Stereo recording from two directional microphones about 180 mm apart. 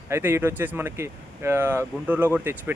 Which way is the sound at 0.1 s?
15° right (ahead or behind).